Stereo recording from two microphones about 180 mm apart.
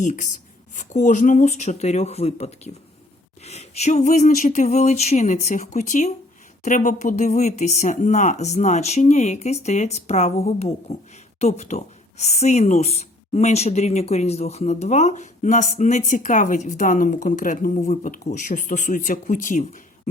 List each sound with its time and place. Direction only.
0.0 s speech: 45° left (ahead or behind)